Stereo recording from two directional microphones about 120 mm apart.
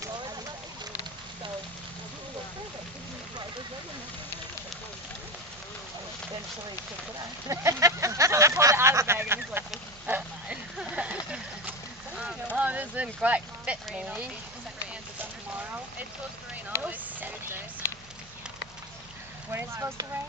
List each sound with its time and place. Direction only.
0.0 s fire: 35° right (ahead or behind)
7.4 s a sound: 25° right (ahead or behind)
12.5 s a sound: 10° right (ahead or behind)
13.9 s speech: 10° right (ahead or behind)
16.8 s speech: 15° right (ahead or behind)
19.5 s speech: 20° right (ahead or behind)